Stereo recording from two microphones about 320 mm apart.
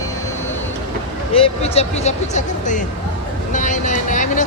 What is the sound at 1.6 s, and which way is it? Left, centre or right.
Speech, centre.